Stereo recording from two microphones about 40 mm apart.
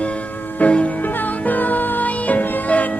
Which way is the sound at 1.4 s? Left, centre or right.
Left.